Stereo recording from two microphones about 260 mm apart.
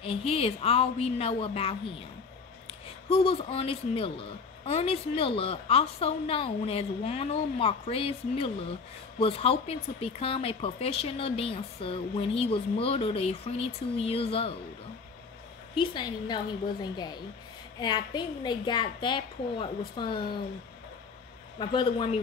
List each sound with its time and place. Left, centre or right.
0.0 s a woman's voice: left
3.1 s a woman's voice: left
15.8 s a woman's voice: centre
21.5 s a woman's voice: centre